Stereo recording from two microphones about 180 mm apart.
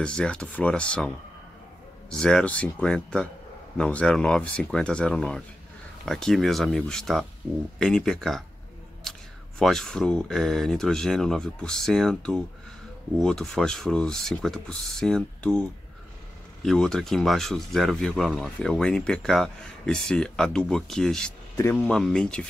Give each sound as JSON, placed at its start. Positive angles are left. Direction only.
{"t": 0.0, "sound": "speech", "side_deg": 5}
{"t": 9.6, "sound": "speech", "side_deg": 0}